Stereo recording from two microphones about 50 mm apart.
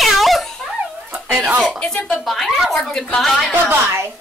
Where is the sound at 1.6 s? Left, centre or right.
Centre.